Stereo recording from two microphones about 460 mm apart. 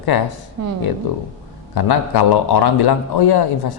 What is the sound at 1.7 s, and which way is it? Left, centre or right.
A man's voice, left.